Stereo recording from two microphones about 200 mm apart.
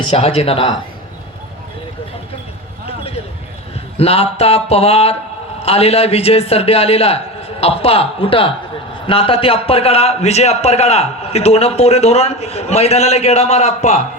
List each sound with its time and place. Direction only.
0.1 s speech: 30° left (ahead or behind)
2.8 s a sound: 30° left (ahead or behind)
3.9 s a man's voice: 30° left (ahead or behind)